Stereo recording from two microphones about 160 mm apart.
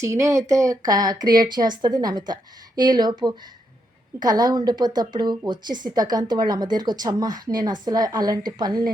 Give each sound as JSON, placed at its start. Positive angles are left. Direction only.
{"t": 0.0, "sound": "a woman's voice", "side_deg": -20}